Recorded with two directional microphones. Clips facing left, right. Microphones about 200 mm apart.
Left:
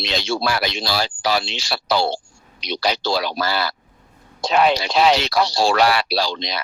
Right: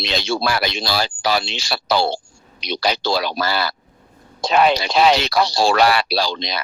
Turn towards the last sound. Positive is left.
turn(degrees=-55)  # may be behind; listen again after turning